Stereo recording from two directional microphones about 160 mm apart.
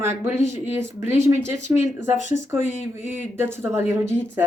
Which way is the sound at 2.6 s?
45° left (ahead or behind).